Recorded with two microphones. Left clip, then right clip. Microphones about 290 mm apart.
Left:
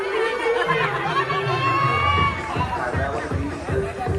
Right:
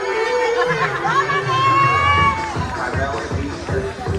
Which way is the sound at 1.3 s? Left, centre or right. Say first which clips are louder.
Right 5 dB; right.